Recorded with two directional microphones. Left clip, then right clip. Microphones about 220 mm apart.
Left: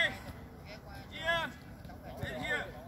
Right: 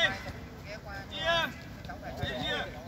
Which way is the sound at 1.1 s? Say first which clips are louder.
Right 4 dB; 5° left (ahead or behind).